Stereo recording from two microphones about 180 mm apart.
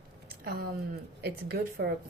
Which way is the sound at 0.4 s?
60° right (ahead or behind).